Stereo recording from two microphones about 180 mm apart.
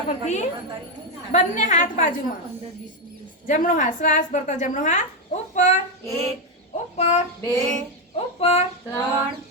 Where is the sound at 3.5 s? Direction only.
45° left (ahead or behind).